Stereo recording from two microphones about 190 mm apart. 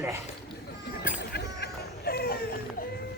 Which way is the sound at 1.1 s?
55° left (ahead or behind).